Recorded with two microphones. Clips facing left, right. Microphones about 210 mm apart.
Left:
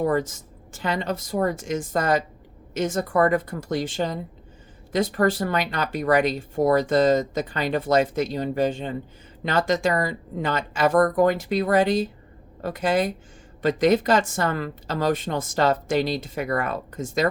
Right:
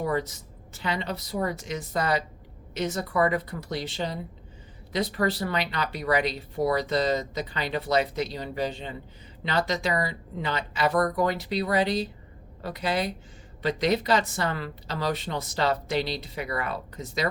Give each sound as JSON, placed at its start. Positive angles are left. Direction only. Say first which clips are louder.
{"t": 0.0, "sound": "speech", "louder": "left 5 dB", "side_deg": 45}